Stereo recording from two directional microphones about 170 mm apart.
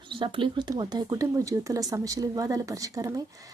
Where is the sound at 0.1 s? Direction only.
30° right (ahead or behind).